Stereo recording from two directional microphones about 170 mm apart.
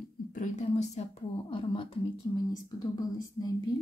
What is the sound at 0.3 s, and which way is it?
Speech, 45° left (ahead or behind).